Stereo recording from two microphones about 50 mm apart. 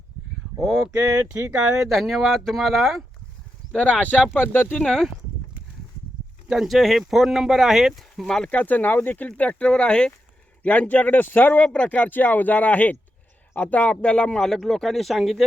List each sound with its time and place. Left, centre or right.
0.9 s speech: right
1.9 s speech: centre
3.8 s speech: left
4.4 s speech: left
4.8 s speech: centre
6.7 s speech: centre
8.4 s speech: left
11.7 s speech: left
14.4 s speech: centre